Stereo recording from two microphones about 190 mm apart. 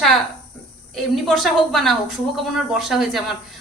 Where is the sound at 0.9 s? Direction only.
Centre (ahead or behind).